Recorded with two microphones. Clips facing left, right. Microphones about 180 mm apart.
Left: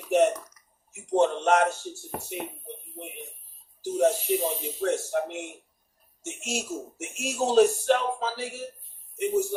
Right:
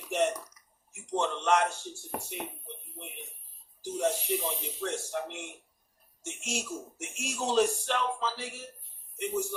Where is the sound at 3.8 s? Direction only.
40° left (ahead or behind).